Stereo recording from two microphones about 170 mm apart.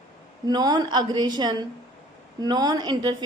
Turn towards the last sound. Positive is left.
turn(degrees=-25)  # may be behind; listen again after turning